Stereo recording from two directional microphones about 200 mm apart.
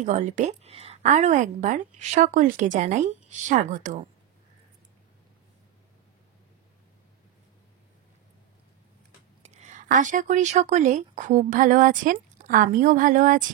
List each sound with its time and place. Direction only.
0.0 s a woman's voice: 35° right (ahead or behind)
9.4 s speech: 35° right (ahead or behind)